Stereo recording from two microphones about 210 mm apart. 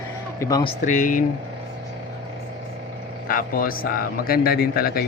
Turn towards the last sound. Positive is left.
turn(degrees=45)  # may be behind; listen again after turning